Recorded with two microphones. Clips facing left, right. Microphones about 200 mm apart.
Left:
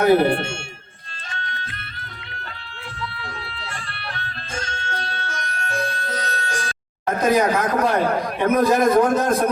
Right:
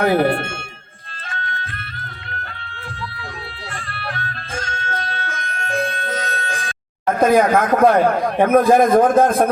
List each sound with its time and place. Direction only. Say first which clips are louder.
0.0 s a man's voice: left 1 dB; 45° right (ahead or behind)
1.3 s music: right 3 dB; 50° right (ahead or behind)
3.9 s music: right 4 dB; 50° right (ahead or behind)
7.2 s a man's voice: right 4 dB; 55° right (ahead or behind)